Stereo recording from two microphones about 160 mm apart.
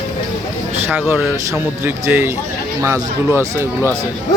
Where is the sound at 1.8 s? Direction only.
10° right (ahead or behind).